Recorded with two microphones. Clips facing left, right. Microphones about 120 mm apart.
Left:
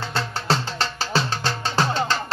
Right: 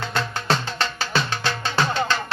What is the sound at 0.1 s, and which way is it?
Music, 30° left (ahead or behind).